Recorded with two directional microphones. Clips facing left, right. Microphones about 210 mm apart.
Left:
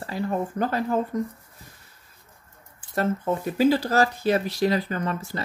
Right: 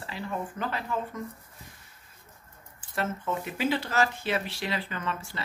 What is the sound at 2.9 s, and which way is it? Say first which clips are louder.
Speech: left 6 dB; 40° left (ahead or behind).